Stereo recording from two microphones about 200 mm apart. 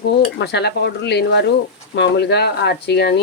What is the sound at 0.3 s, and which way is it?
A woman's voice, 55° left (ahead or behind).